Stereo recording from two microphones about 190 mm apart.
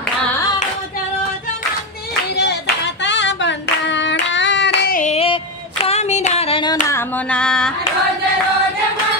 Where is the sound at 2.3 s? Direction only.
60° left (ahead or behind).